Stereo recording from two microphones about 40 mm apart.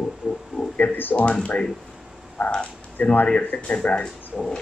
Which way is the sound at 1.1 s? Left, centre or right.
Left.